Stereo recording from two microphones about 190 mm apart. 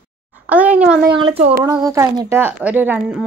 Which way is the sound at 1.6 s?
20° right (ahead or behind).